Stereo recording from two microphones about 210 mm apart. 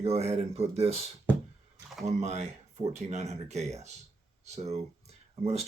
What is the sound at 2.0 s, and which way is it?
Speech, 30° right (ahead or behind).